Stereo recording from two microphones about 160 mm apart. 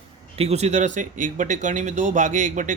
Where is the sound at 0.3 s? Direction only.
40° right (ahead or behind).